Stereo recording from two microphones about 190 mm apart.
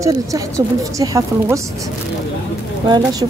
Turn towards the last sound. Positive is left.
turn(degrees=-20)  # may be behind; listen again after turning